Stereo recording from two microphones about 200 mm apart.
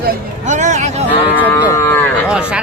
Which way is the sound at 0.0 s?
40° right (ahead or behind).